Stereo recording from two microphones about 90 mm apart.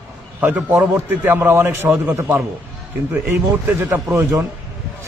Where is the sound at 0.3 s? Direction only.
20° right (ahead or behind).